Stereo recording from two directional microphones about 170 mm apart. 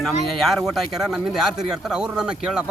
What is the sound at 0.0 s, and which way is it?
Speech, centre (ahead or behind).